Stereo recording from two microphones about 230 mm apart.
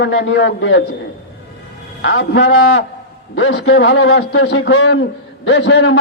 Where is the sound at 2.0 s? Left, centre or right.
Left.